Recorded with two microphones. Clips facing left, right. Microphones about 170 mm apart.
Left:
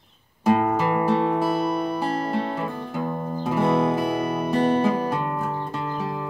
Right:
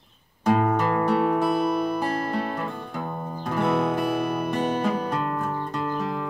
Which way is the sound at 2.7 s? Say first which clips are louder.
Left 4 dB; 5° left (ahead or behind).